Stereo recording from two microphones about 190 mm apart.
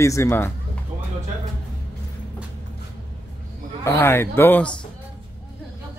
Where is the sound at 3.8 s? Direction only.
15° left (ahead or behind).